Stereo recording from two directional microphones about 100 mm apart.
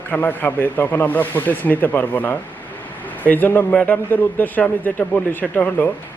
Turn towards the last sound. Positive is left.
turn(degrees=15)  # may be behind; listen again after turning